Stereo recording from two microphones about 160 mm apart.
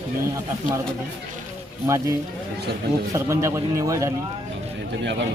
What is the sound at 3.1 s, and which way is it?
Speech, 20° right (ahead or behind).